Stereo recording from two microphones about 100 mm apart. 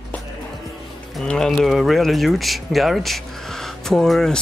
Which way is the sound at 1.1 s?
5° left (ahead or behind).